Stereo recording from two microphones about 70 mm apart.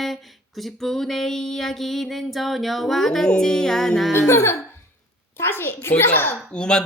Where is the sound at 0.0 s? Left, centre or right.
Centre.